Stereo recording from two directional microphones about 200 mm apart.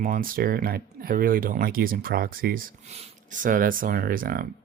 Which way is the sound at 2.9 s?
35° right (ahead or behind).